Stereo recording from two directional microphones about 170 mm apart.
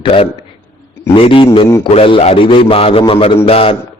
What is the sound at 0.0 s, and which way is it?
A man's voice, 35° left (ahead or behind).